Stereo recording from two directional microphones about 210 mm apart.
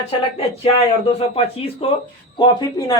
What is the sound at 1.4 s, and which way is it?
Speech, 30° left (ahead or behind).